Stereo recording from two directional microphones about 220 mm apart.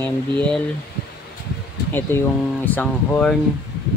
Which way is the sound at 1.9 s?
10° left (ahead or behind).